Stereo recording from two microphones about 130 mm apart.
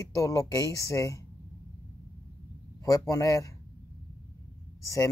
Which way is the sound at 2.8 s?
25° left (ahead or behind).